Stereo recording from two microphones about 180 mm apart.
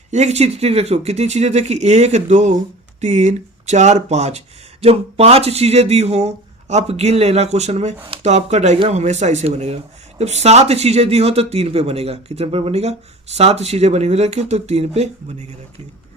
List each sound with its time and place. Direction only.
0.1 s speech: 40° right (ahead or behind)